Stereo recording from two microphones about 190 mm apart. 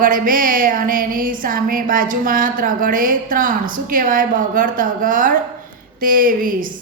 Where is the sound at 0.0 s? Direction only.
45° right (ahead or behind).